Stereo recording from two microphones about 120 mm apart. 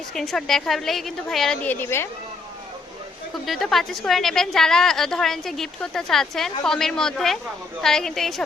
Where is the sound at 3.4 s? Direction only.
Centre (ahead or behind).